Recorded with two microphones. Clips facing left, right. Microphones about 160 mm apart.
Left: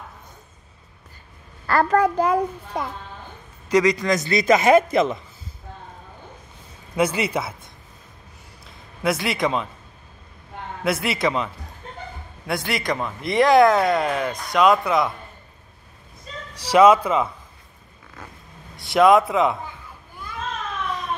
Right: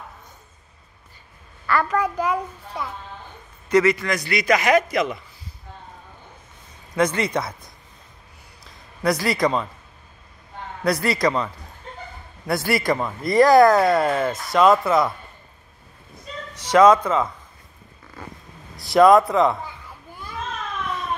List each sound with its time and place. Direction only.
1.7 s a child's voice: 40° left (ahead or behind)
3.7 s a man's voice: 15° left (ahead or behind)
7.0 s speech: 10° left (ahead or behind)
9.0 s speech: centre (ahead or behind)
10.8 s speech: 5° left (ahead or behind)
16.7 s speech: 10° left (ahead or behind)
18.8 s speech: centre (ahead or behind)